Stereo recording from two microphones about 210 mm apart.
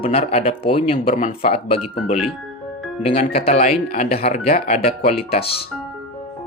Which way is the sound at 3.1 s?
30° left (ahead or behind).